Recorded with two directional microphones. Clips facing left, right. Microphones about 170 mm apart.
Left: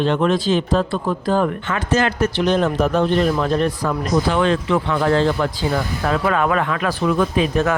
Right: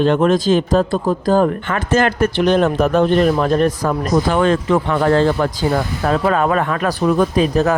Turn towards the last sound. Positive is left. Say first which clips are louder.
# right 3 dB
turn(degrees=-35)  # may be behind; listen again after turning